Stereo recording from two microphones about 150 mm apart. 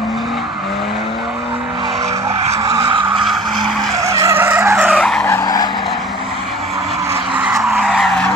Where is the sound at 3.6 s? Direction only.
25° right (ahead or behind).